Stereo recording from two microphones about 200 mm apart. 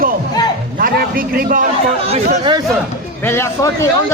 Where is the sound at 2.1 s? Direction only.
30° right (ahead or behind).